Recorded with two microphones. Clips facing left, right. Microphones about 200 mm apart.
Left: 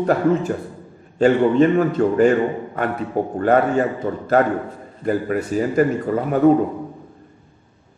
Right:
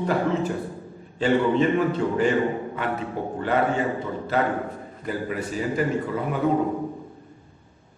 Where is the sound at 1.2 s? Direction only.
45° left (ahead or behind).